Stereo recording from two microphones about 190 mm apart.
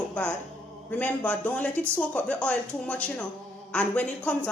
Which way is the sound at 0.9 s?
10° left (ahead or behind).